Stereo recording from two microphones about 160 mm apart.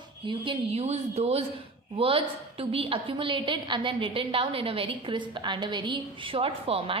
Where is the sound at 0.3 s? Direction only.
35° right (ahead or behind).